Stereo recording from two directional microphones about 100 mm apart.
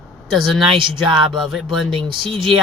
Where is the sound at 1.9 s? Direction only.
55° right (ahead or behind).